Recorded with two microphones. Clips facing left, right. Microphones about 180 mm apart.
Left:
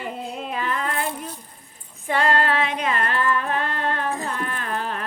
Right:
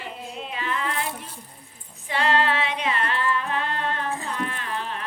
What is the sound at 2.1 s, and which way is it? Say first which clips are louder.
Music: left 2 dB; 45° left (ahead or behind).